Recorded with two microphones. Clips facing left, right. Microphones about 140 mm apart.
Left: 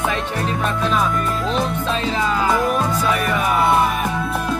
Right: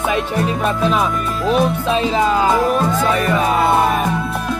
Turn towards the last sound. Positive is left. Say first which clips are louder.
# right 2 dB
turn(degrees=-25)  # may be behind; listen again after turning